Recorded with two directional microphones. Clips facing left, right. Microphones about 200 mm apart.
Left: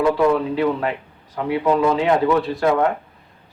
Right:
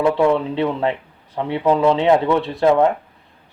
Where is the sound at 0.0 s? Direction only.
25° right (ahead or behind).